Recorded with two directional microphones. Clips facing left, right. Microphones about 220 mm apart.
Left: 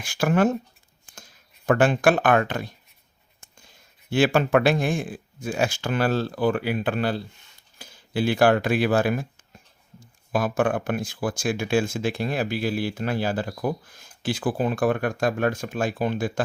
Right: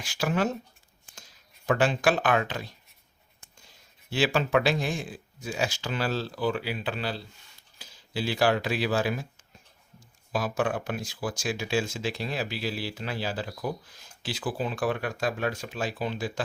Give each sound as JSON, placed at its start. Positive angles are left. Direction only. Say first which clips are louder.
{"t": 0.0, "sound": "speech", "louder": "left 6 dB", "side_deg": 50}
{"t": 1.6, "sound": "speech", "louder": "left 5 dB", "side_deg": 50}
{"t": 4.1, "sound": "speech", "louder": "left 5 dB", "side_deg": 50}
{"t": 10.3, "sound": "speech", "louder": "left 5 dB", "side_deg": 50}